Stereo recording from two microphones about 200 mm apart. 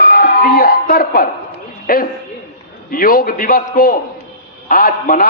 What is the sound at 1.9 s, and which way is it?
A man's voice, 45° left (ahead or behind).